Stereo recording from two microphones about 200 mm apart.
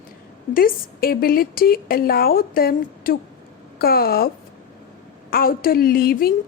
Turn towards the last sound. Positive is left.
turn(degrees=50)  # may be behind; listen again after turning